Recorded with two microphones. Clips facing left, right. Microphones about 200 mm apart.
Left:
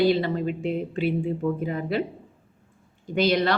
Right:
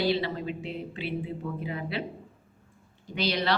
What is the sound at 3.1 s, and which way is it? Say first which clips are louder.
Speech: left 6 dB; 50° left (ahead or behind).